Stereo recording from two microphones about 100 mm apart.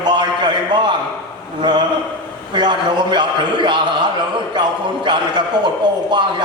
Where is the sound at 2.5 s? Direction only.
50° right (ahead or behind).